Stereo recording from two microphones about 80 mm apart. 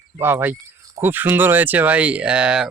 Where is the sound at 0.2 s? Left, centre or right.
Right.